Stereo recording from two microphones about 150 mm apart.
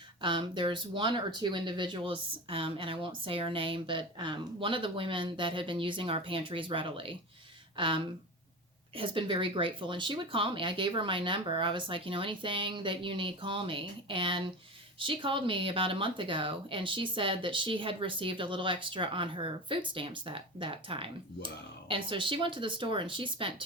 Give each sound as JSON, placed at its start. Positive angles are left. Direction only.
{"t": 0.2, "sound": "speech", "side_deg": -35}